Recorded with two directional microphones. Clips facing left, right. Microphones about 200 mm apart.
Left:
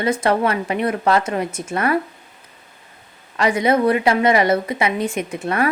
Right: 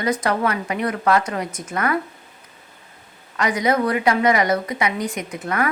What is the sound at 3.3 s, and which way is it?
A woman's voice, 30° left (ahead or behind).